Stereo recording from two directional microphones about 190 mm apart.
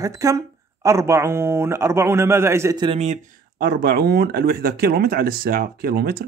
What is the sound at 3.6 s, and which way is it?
Speech, 55° right (ahead or behind).